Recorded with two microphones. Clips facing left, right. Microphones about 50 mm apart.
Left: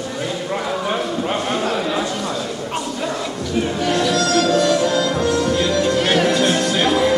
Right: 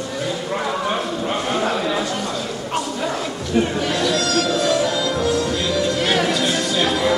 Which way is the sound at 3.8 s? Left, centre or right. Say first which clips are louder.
Left 2 dB; centre.